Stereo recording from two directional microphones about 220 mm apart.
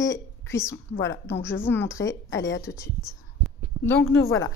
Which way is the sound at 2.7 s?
55° left (ahead or behind).